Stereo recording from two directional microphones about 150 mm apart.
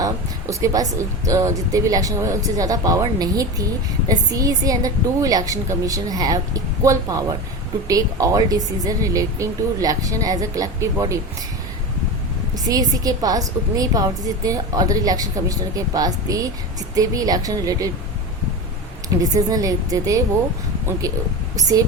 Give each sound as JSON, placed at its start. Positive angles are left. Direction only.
{"t": 0.0, "sound": "a woman's voice", "side_deg": -20}
{"t": 12.6, "sound": "a woman's voice", "side_deg": -25}
{"t": 19.2, "sound": "a woman's voice", "side_deg": -25}
{"t": 21.5, "sound": "speech", "side_deg": -25}